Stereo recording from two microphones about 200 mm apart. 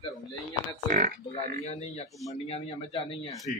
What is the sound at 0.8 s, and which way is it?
Speech, 45° right (ahead or behind).